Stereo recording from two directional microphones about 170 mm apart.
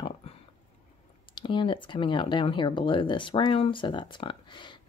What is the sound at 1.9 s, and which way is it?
Speech, 30° left (ahead or behind).